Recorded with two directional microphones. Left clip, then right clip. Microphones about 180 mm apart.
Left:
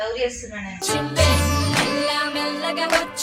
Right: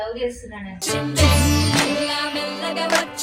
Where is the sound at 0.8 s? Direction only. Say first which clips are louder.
Even; centre (ahead or behind).